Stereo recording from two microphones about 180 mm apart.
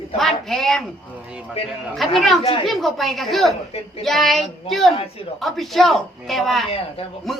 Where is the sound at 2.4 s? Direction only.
35° left (ahead or behind).